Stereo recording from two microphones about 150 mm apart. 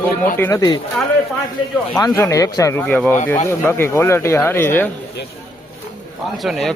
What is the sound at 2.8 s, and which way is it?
Speech, 5° left (ahead or behind).